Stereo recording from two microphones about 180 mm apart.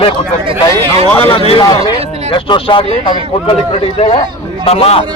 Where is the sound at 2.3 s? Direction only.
30° left (ahead or behind).